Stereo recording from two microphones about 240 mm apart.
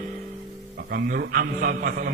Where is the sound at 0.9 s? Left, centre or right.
Right.